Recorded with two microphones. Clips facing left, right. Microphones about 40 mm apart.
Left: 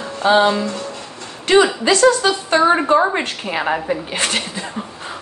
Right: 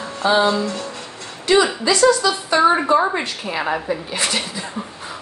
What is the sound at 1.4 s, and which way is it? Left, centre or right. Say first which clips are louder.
A woman's voice: left 3 dB; left.